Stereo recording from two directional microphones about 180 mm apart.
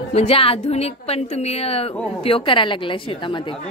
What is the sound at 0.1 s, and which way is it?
A woman's voice, 30° left (ahead or behind).